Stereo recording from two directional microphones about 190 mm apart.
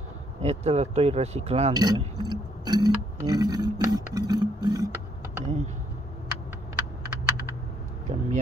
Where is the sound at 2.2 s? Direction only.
20° right (ahead or behind).